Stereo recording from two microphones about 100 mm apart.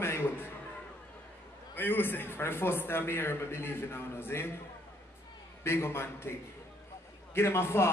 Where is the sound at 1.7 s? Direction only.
20° left (ahead or behind).